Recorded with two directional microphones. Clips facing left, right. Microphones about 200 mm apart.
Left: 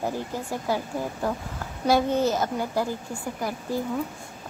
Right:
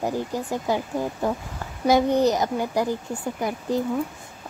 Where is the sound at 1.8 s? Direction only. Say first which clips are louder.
Right 3 dB; 15° right (ahead or behind).